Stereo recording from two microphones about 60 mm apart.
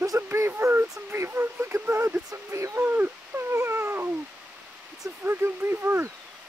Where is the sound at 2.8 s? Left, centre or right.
Right.